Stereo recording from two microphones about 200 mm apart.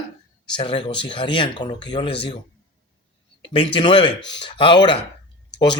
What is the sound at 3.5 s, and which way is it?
Speech, 25° left (ahead or behind).